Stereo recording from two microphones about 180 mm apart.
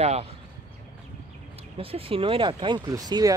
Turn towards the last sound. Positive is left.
turn(degrees=-20)  # may be behind; listen again after turning